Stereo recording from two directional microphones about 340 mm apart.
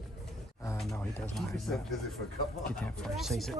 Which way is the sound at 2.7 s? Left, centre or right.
Centre.